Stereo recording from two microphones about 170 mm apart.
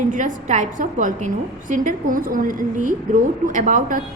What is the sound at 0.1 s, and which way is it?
A woman's voice, 50° right (ahead or behind).